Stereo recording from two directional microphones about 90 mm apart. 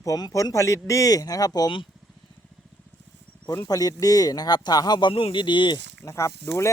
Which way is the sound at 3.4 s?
40° left (ahead or behind).